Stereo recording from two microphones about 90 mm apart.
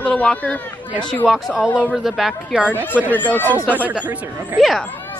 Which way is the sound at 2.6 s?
15° right (ahead or behind).